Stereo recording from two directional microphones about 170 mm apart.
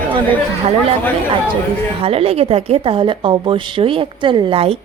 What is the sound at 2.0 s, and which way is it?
A woman's voice, 35° right (ahead or behind).